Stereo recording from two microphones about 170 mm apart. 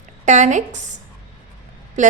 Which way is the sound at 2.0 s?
45° right (ahead or behind).